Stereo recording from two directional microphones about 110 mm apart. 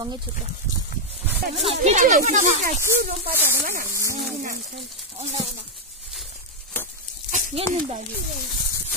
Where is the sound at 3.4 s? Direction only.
20° right (ahead or behind).